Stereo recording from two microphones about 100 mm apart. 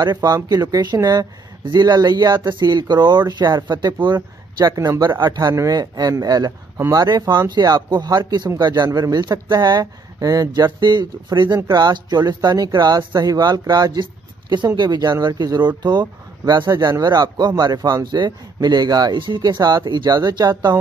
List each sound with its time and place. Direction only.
0.0 s a man's voice: 40° right (ahead or behind)
4.6 s a man's voice: 35° right (ahead or behind)